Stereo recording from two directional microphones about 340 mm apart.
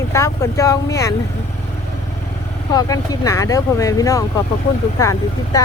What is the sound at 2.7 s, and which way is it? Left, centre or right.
Speech, centre.